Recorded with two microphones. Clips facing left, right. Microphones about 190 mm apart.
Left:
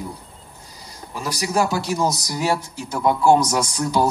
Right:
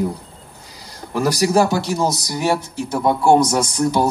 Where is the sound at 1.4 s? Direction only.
30° right (ahead or behind).